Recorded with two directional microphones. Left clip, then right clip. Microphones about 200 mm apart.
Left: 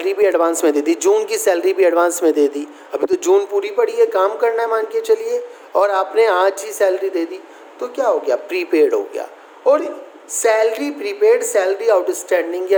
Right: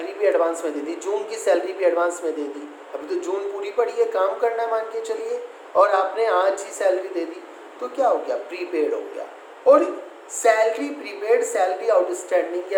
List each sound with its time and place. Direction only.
0.0 s a man's voice: 60° left (ahead or behind)
9.7 s a man's voice: 45° left (ahead or behind)